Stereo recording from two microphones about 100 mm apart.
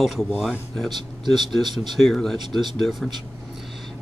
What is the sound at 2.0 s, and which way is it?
A man's voice, 5° left (ahead or behind).